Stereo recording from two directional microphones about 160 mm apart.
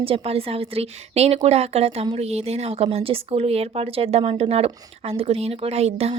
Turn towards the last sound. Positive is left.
turn(degrees=-40)  # may be behind; listen again after turning